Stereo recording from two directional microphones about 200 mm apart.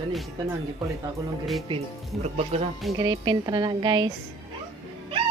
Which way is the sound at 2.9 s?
20° right (ahead or behind).